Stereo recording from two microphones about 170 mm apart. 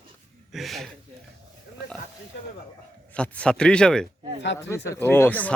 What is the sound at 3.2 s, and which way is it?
Speech, 5° left (ahead or behind).